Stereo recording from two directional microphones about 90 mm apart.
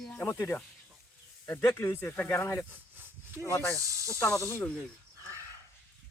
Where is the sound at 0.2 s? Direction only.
25° left (ahead or behind).